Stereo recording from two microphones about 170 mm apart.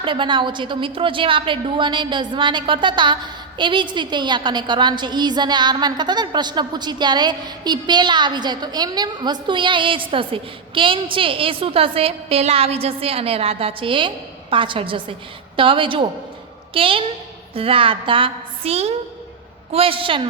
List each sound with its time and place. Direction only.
0.0 s a woman's voice: 30° right (ahead or behind)